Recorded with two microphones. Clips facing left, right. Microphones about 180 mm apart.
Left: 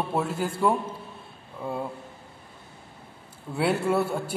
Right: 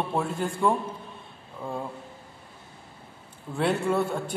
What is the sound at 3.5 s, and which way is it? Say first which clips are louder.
Speech: left 1 dB; 10° left (ahead or behind).